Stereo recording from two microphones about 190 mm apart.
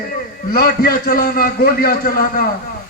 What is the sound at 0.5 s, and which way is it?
A man's voice, 55° left (ahead or behind).